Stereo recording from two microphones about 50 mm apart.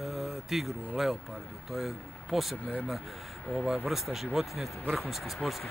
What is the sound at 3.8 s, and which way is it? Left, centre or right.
Speech, centre.